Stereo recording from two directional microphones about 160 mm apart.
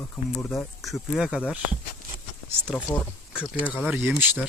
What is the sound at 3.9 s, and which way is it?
Speech, 10° right (ahead or behind).